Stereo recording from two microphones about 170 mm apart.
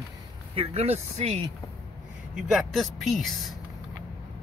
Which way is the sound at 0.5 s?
40° right (ahead or behind).